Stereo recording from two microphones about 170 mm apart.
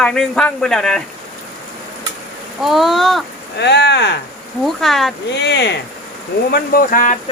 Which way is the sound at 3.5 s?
90° left.